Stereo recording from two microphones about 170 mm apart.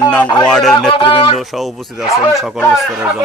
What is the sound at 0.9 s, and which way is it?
Music, 30° left (ahead or behind).